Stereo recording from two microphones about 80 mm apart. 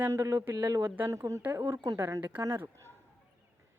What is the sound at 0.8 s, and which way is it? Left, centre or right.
Speech, right.